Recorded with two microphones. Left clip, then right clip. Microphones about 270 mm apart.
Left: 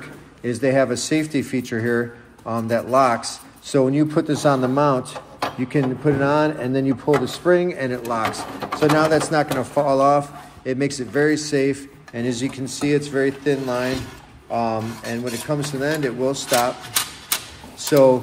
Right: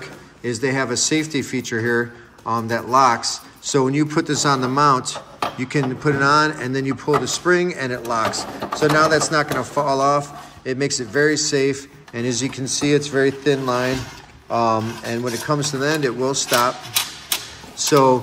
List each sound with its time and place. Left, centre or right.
0.4 s a man's voice: centre
7.1 s speech: centre
7.4 s a man's voice: centre
17.8 s speech: centre